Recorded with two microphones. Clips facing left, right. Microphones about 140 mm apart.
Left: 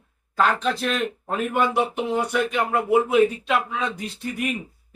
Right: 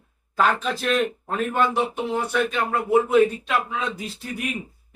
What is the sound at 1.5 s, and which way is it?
Speech, 15° left (ahead or behind).